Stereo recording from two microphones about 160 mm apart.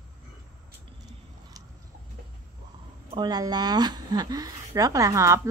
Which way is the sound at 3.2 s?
25° right (ahead or behind).